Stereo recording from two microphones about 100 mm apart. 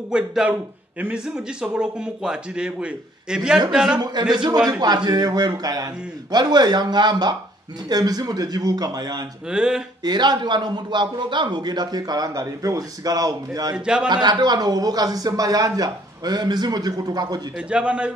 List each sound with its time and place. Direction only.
0.1 s speech: 10° right (ahead or behind)
4.0 s a man's voice: 45° right (ahead or behind)
9.5 s speech: 10° right (ahead or behind)
10.0 s a man's voice: 45° right (ahead or behind)
13.7 s speech: 10° right (ahead or behind)
14.0 s a man's voice: 45° right (ahead or behind)
17.6 s speech: 10° right (ahead or behind)